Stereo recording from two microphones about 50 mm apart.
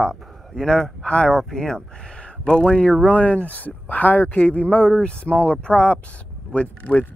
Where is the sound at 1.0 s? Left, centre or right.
Left.